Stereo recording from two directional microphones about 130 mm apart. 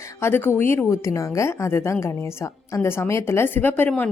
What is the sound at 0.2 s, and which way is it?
A woman's voice, 20° left (ahead or behind).